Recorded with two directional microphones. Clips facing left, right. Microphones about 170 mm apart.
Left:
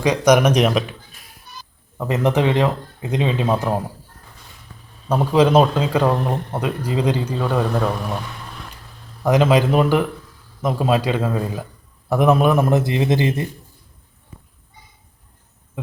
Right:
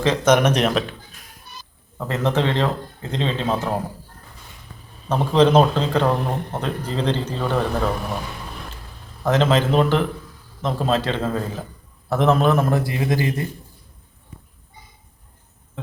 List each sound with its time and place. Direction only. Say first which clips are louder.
0.0 s a man's voice: left 2 dB; 15° left (ahead or behind)
2.0 s a man's voice: left 3 dB; 15° left (ahead or behind)
5.0 s a man's voice: left 1 dB; 10° left (ahead or behind)
9.2 s a man's voice: left 3 dB; 15° left (ahead or behind)